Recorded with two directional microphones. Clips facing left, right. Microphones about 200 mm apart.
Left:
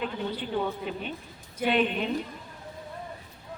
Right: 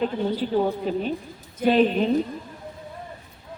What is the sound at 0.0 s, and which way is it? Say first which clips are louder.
A woman's voice: right 8 dB; 35° right (ahead or behind).